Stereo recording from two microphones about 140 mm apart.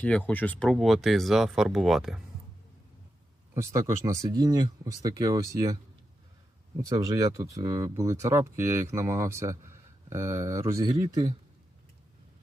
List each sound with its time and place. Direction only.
0.0 s speech: 10° left (ahead or behind)
3.5 s speech: 20° right (ahead or behind)
6.8 s speech: 25° right (ahead or behind)